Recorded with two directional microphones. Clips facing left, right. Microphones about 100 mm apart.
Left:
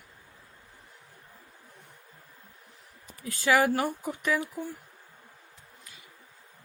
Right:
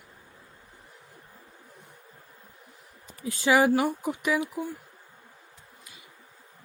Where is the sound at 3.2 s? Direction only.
25° right (ahead or behind).